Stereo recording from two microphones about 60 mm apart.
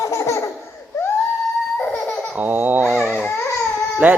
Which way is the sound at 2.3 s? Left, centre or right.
Right.